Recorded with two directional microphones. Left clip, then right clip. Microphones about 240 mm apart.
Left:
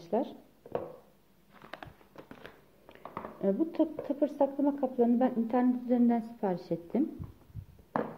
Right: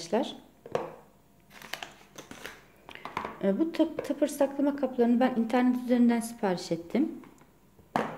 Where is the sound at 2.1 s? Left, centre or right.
Centre.